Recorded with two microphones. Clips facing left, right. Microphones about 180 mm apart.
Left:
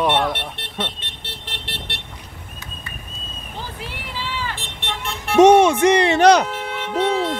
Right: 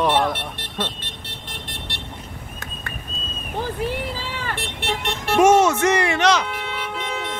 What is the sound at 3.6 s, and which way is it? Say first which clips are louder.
Vehicle: right 9 dB; 45° right (ahead or behind).